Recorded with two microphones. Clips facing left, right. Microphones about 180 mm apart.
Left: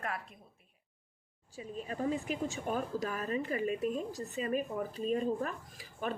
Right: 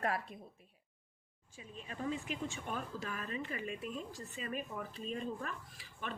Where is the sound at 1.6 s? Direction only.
40° left (ahead or behind).